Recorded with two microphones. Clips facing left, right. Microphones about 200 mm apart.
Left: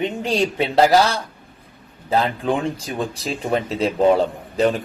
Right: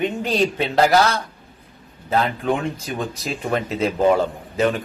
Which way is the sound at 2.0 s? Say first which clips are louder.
Left 1 dB; 30° left (ahead or behind).